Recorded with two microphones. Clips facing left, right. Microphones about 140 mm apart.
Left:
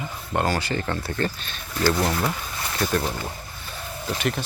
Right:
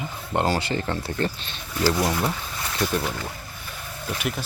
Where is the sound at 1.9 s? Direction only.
5° right (ahead or behind).